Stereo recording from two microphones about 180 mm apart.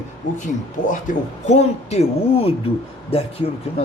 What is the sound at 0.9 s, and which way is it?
Speech, 45° left (ahead or behind).